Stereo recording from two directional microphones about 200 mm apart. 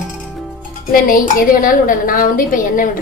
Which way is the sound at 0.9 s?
45° left (ahead or behind).